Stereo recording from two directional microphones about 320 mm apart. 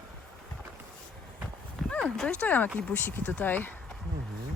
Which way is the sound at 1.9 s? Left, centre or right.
Centre.